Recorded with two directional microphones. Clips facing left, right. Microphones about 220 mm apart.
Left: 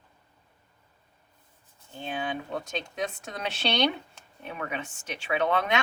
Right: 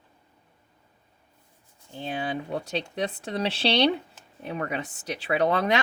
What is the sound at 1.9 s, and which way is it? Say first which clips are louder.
Speech: right 2 dB; 35° right (ahead or behind).